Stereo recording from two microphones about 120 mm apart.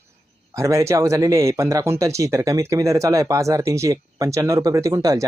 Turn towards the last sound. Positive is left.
turn(degrees=-25)  # may be behind; listen again after turning